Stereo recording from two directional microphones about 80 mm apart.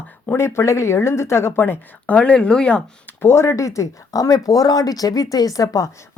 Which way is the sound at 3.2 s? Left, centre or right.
Left.